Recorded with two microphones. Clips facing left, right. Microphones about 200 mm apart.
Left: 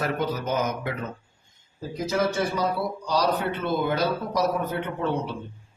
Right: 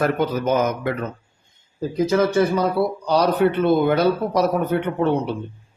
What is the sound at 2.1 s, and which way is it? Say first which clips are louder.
A man's voice: right 6 dB; 60° right (ahead or behind).